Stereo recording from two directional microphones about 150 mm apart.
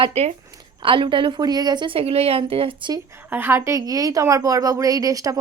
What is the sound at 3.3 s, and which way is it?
A woman's voice, 15° right (ahead or behind).